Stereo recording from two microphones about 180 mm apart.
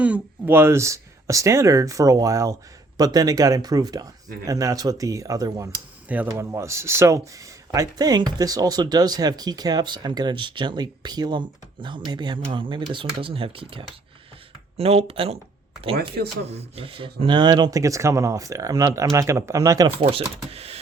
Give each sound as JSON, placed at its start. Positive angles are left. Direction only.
{"t": 0.0, "sound": "speech", "side_deg": -10}
{"t": 16.0, "sound": "speech", "side_deg": -65}
{"t": 16.5, "sound": "speech", "side_deg": -35}
{"t": 20.5, "sound": "speech", "side_deg": -35}